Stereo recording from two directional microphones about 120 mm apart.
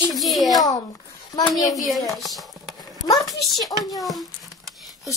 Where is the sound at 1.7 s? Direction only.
Centre (ahead or behind).